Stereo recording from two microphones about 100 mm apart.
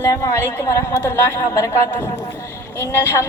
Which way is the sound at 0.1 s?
35° left (ahead or behind).